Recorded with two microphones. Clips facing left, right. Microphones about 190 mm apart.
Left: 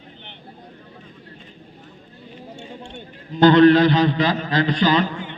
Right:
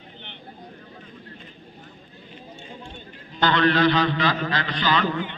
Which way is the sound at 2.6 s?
75° left (ahead or behind).